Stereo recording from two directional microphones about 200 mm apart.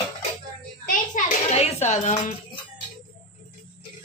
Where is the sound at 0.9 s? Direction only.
35° left (ahead or behind).